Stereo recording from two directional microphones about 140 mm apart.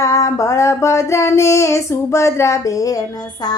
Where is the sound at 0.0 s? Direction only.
20° left (ahead or behind).